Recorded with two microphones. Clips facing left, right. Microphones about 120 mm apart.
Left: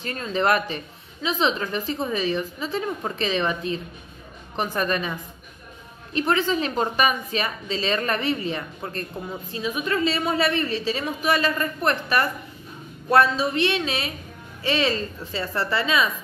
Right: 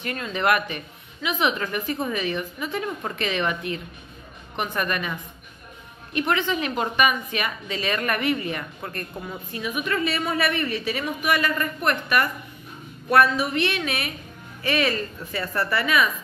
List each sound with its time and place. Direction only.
0.0 s a woman's voice: 35° left (ahead or behind)
6.1 s a woman's voice: 35° left (ahead or behind)